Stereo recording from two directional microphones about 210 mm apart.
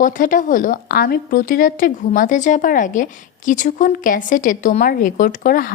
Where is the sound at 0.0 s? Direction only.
40° left (ahead or behind).